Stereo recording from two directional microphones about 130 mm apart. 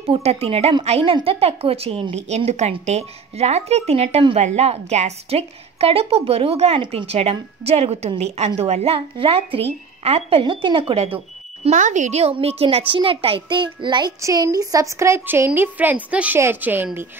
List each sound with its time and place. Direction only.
0.0 s a woman's voice: 50° right (ahead or behind)
11.7 s a woman's voice: 70° right (ahead or behind); by 17.1 s 15° right (ahead or behind)